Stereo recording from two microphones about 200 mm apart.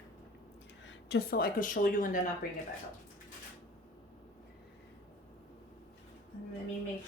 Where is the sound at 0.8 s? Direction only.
55° left (ahead or behind).